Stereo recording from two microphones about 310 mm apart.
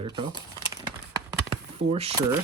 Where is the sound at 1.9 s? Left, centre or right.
Centre.